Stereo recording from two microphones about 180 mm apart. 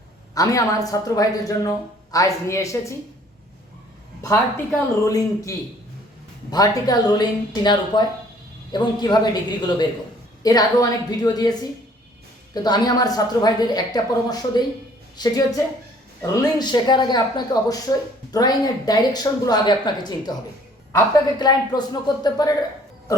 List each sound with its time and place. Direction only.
0.3 s speech: 20° left (ahead or behind)
4.2 s speech: 15° left (ahead or behind)
12.6 s speech: 20° left (ahead or behind)